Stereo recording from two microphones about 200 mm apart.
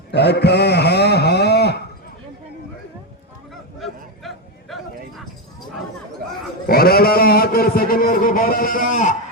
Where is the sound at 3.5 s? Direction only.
Centre (ahead or behind).